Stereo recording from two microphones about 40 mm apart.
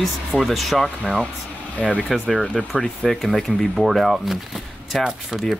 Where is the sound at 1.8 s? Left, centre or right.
Centre.